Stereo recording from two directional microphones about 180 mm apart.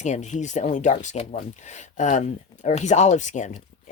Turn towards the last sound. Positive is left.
turn(degrees=45)  # may be behind; listen again after turning